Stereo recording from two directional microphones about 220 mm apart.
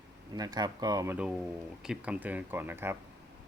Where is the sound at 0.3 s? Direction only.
15° right (ahead or behind).